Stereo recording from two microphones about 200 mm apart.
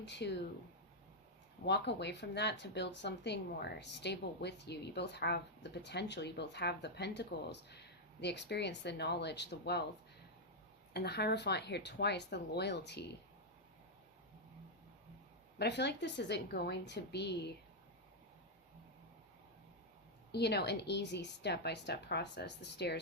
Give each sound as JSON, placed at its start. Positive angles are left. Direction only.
{"t": 0.0, "sound": "speech", "side_deg": 60}
{"t": 1.6, "sound": "speech", "side_deg": 60}
{"t": 10.9, "sound": "speech", "side_deg": 55}
{"t": 15.5, "sound": "speech", "side_deg": 55}
{"t": 20.3, "sound": "speech", "side_deg": 55}